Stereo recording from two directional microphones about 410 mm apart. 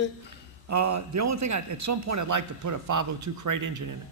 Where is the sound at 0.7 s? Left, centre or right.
Right.